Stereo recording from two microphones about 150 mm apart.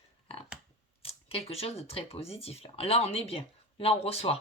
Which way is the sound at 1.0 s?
40° left (ahead or behind).